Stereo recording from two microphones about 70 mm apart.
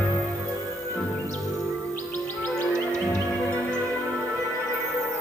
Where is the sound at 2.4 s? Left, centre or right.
Centre.